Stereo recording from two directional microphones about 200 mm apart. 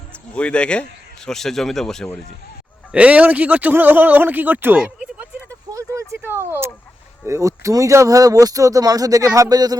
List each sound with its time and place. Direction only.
0.1 s a man's voice: 5° left (ahead or behind)
2.9 s a sound: 5° right (ahead or behind)
7.3 s speech: 15° right (ahead or behind)